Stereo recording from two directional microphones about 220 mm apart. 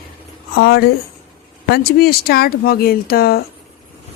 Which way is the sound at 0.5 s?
45° left (ahead or behind).